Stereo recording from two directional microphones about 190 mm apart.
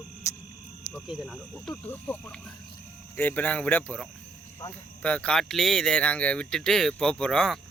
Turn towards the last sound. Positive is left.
turn(degrees=5)  # may be behind; listen again after turning